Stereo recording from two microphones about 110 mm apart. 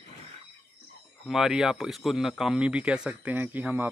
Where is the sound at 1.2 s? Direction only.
5° right (ahead or behind).